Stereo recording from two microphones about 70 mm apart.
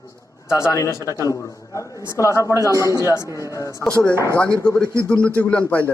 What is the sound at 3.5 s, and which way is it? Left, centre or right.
Speech, left.